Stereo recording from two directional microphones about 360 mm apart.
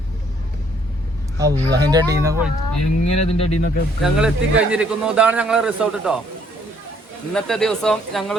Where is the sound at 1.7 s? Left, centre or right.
Centre.